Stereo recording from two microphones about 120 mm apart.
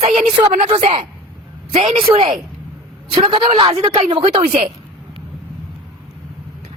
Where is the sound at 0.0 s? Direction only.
70° right (ahead or behind).